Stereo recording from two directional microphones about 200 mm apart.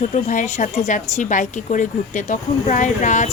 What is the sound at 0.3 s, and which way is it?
A woman's voice, 40° left (ahead or behind).